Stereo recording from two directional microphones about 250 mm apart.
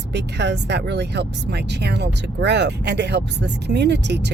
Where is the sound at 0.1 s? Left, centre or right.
Right.